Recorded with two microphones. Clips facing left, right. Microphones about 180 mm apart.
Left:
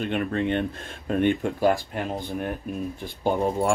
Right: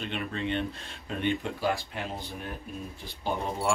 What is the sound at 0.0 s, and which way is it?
Speech, 55° left (ahead or behind).